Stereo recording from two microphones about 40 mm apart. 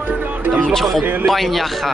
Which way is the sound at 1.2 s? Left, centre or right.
Centre.